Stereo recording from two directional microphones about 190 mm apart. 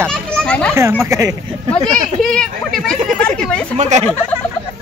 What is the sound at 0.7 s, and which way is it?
Speech, 15° right (ahead or behind).